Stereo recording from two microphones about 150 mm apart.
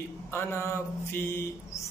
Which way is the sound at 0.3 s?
15° left (ahead or behind).